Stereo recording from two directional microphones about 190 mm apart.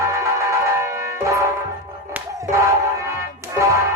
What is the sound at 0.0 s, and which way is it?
Music, 15° right (ahead or behind).